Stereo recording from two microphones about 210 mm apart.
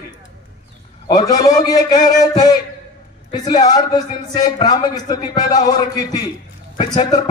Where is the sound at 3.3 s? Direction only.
20° left (ahead or behind).